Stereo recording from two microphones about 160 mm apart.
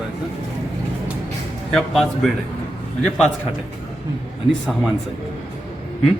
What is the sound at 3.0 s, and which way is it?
Speech, 5° left (ahead or behind).